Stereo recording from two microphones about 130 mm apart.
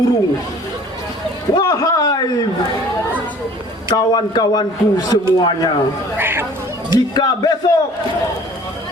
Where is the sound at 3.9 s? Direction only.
35° left (ahead or behind).